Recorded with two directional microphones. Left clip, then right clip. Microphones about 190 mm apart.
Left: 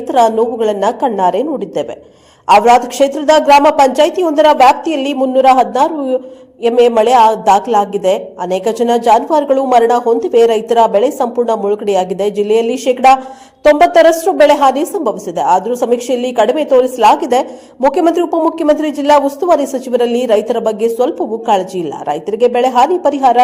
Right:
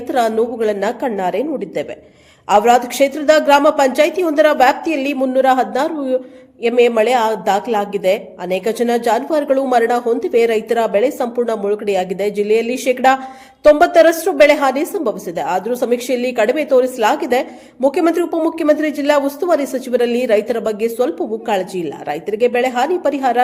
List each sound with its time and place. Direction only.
0.1 s a woman's voice: centre (ahead or behind)
6.7 s a woman's voice: centre (ahead or behind)
11.2 s speech: 15° right (ahead or behind)
11.6 s a woman's voice: centre (ahead or behind)
18.2 s speech: 15° right (ahead or behind)
18.6 s a woman's voice: centre (ahead or behind)